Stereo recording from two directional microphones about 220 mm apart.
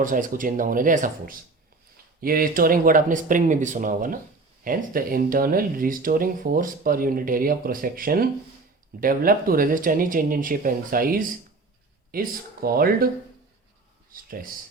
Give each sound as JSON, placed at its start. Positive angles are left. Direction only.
{"t": 0.0, "sound": "speech", "side_deg": -35}
{"t": 14.1, "sound": "speech", "side_deg": -40}